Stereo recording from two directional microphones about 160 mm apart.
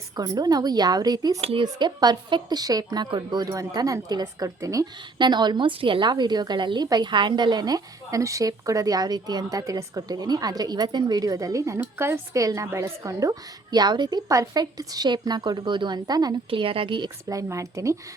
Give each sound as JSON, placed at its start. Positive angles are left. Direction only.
{"t": 0.2, "sound": "a woman's voice", "side_deg": -25}
{"t": 1.4, "sound": "speech", "side_deg": -40}
{"t": 1.6, "sound": "a woman's voice", "side_deg": -25}